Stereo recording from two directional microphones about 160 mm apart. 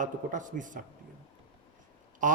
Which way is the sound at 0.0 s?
55° right (ahead or behind).